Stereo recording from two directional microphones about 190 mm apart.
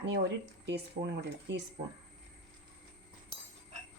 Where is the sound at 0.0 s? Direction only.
65° right (ahead or behind).